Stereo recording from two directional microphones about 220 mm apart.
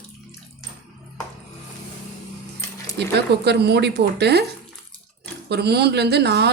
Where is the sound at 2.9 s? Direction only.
50° right (ahead or behind).